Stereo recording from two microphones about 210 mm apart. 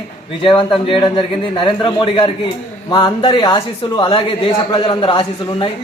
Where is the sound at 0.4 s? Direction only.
25° left (ahead or behind).